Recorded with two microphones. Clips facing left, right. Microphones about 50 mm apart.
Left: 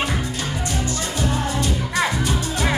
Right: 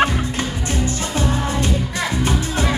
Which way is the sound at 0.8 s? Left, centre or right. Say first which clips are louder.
Right 5 dB; right.